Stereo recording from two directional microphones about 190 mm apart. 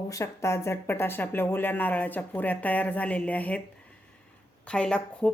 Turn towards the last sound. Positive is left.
turn(degrees=5)  # may be behind; listen again after turning